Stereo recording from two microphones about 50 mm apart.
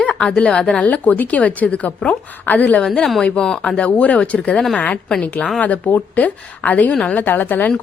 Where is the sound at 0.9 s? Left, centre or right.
Left.